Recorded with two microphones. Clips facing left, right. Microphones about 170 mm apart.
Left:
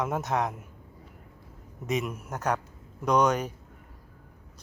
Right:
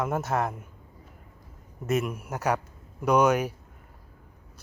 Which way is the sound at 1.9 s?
Centre (ahead or behind).